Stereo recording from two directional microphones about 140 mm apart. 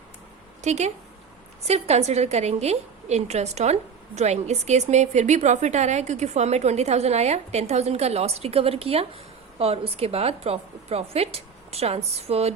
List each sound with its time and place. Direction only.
0.6 s a woman's voice: 50° right (ahead or behind)